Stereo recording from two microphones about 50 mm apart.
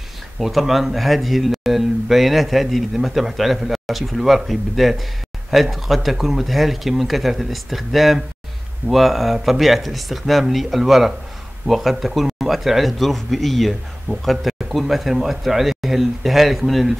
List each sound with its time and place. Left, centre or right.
0.4 s speech: centre